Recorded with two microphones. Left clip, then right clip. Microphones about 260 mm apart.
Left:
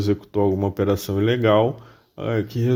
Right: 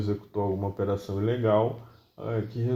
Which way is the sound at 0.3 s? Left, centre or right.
Left.